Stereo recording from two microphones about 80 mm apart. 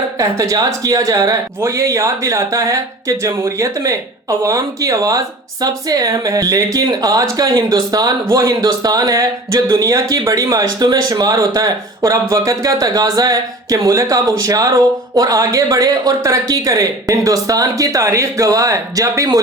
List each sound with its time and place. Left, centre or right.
0.2 s speech: right